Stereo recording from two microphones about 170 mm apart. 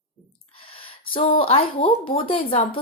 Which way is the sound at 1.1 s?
30° left (ahead or behind).